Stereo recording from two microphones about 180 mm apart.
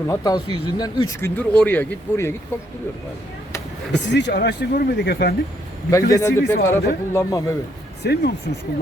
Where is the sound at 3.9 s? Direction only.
75° left (ahead or behind).